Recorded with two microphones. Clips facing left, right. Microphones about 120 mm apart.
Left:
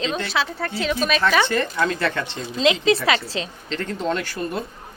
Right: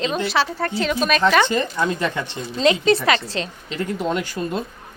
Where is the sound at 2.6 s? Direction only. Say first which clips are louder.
Right 1 dB; centre (ahead or behind).